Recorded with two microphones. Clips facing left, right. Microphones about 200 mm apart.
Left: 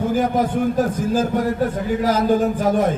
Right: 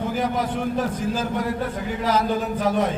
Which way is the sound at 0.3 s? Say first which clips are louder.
Left 6 dB; 45° left (ahead or behind).